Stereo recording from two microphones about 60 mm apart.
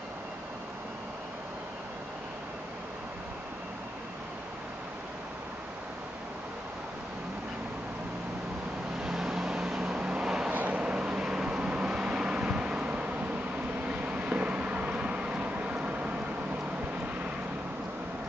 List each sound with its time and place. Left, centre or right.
9.0 s vehicle: centre
10.5 s vehicle: right